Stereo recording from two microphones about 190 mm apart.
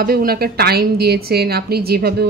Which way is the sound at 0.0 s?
55° right (ahead or behind).